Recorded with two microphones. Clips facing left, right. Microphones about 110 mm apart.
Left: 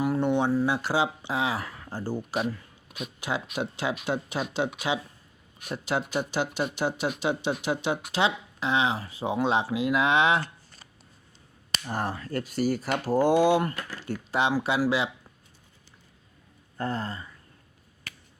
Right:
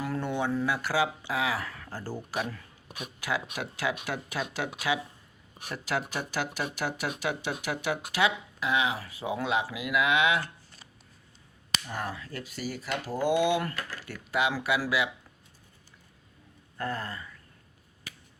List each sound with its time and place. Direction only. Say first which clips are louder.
0.0 s a sound: left 6 dB; 20° left (ahead or behind)
0.6 s speech: left 2 dB; 25° left (ahead or behind); by 13.6 s 40° left (ahead or behind)
13.6 s speech: left 4 dB; 25° left (ahead or behind)
16.7 s speech: left 3 dB; 30° left (ahead or behind)